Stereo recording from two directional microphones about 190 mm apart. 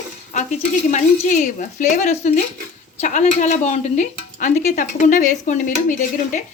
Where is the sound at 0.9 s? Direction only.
40° left (ahead or behind).